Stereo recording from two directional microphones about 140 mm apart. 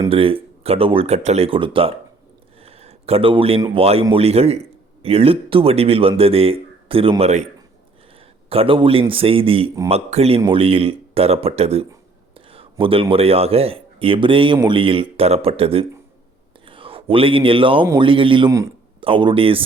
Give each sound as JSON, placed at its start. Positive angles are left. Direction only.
{"t": 0.1, "sound": "speech", "side_deg": -40}
{"t": 2.6, "sound": "a sound", "side_deg": -45}
{"t": 3.8, "sound": "speech", "side_deg": -45}
{"t": 7.2, "sound": "speech", "side_deg": -50}
{"t": 8.4, "sound": "speech", "side_deg": -40}